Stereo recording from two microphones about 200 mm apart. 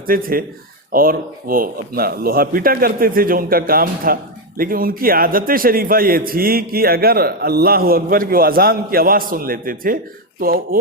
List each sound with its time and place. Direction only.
0.1 s speech: 45° right (ahead or behind)